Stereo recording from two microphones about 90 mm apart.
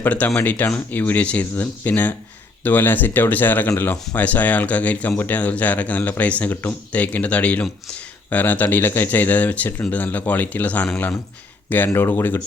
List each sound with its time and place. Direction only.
0.0 s speech: 15° left (ahead or behind)
11.9 s speech: 25° left (ahead or behind)